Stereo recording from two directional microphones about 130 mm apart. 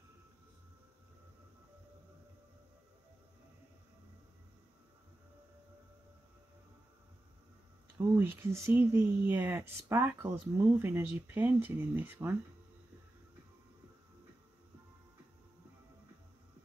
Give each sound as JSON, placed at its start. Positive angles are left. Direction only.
{"t": 8.2, "sound": "speech", "side_deg": -15}